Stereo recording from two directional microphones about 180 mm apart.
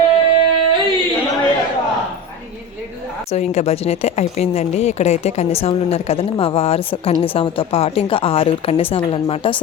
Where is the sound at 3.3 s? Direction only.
40° left (ahead or behind).